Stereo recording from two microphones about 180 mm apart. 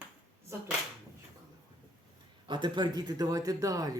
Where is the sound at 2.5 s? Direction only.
25° right (ahead or behind).